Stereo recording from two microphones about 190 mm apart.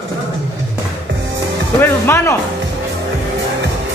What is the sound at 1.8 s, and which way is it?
Speech, 10° left (ahead or behind).